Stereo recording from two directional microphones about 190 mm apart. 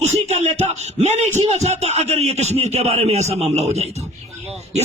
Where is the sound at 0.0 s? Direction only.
35° right (ahead or behind).